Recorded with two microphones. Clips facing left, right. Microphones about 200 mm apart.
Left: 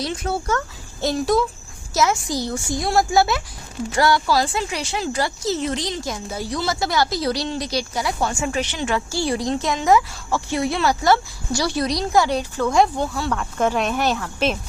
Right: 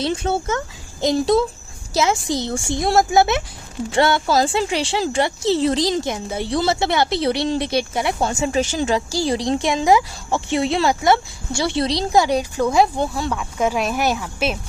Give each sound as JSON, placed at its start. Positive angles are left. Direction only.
{"t": 0.1, "sound": "speech", "side_deg": -30}
{"t": 8.5, "sound": "a woman's voice", "side_deg": -40}
{"t": 9.8, "sound": "speech", "side_deg": -20}
{"t": 12.2, "sound": "speech", "side_deg": -15}
{"t": 13.4, "sound": "speech", "side_deg": -5}